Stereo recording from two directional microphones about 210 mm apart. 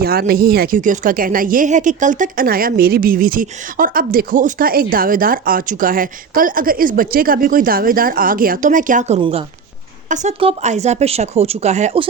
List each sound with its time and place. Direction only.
0.0 s speech: 45° right (ahead or behind)